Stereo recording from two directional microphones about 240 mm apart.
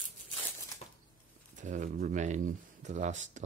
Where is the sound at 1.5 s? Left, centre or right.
Right.